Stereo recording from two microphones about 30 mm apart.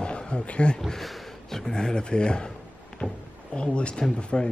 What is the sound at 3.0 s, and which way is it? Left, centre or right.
Speech, left.